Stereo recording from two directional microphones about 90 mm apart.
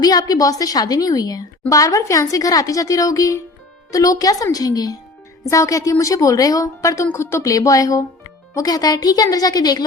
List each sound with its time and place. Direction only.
0.0 s a woman's voice: 45° left (ahead or behind)